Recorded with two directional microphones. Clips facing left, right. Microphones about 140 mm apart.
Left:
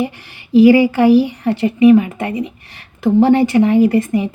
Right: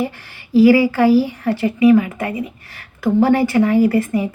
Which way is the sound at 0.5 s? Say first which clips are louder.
Left 2 dB; 20° left (ahead or behind).